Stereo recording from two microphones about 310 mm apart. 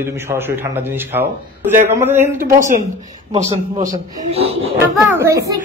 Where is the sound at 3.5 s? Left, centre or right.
Right.